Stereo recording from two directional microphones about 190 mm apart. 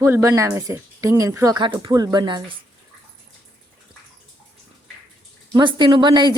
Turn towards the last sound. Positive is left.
turn(degrees=-25)  # may be behind; listen again after turning